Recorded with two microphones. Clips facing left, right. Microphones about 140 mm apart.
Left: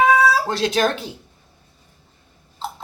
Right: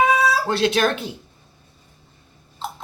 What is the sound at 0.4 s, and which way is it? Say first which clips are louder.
Speech: right 1 dB; 40° left (ahead or behind).